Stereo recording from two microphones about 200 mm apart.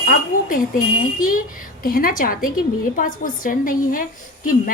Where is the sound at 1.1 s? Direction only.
45° left (ahead or behind).